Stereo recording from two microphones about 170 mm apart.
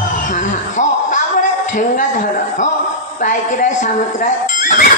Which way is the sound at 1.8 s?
50° left (ahead or behind).